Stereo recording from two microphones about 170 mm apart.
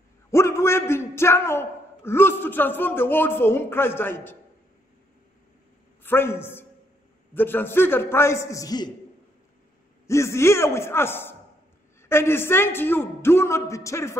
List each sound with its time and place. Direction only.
0.3 s a man's voice: 15° left (ahead or behind)
6.0 s a man's voice: 15° left (ahead or behind)
10.0 s a man's voice: 15° left (ahead or behind)